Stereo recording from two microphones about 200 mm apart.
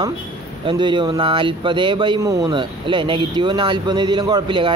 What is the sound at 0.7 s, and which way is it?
Speech, 25° right (ahead or behind).